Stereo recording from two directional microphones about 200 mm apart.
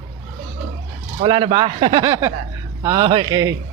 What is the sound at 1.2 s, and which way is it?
Speech, 25° right (ahead or behind).